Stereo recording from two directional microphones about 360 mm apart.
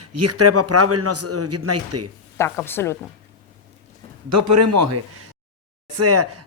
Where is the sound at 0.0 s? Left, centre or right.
Right.